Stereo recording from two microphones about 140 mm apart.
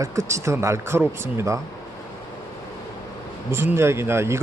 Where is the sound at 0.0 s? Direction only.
20° right (ahead or behind).